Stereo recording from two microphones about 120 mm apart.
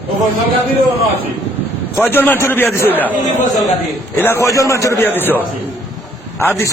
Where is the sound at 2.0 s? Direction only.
15° left (ahead or behind).